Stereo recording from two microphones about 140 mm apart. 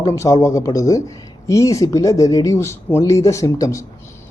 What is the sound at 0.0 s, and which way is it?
Speech, 20° left (ahead or behind).